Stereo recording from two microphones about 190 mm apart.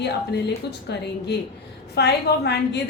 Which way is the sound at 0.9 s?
65° left (ahead or behind).